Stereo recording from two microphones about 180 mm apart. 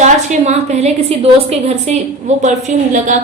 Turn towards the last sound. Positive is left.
turn(degrees=-40)  # may be behind; listen again after turning